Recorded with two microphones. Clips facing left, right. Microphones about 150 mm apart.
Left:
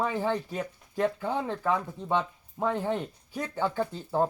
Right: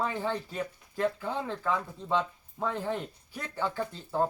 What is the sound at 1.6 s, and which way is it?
Speech, 20° left (ahead or behind).